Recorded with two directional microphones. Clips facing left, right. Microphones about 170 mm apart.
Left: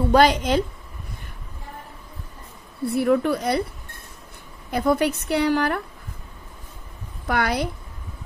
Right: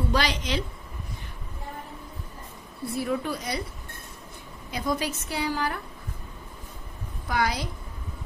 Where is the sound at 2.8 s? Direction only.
65° left (ahead or behind).